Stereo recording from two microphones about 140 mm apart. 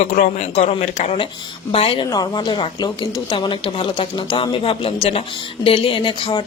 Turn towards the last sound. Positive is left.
turn(degrees=35)  # may be behind; listen again after turning